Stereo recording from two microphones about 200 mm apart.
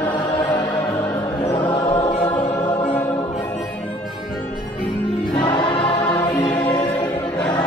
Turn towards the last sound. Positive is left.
turn(degrees=25)  # may be behind; listen again after turning